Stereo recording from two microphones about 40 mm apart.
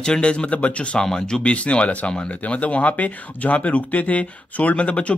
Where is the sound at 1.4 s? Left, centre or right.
Left.